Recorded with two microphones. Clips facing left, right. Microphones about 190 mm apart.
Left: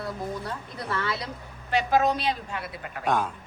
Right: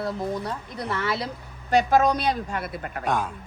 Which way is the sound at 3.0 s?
10° right (ahead or behind).